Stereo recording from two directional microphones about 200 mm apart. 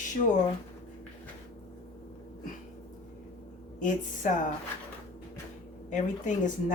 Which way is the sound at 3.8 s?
40° left (ahead or behind).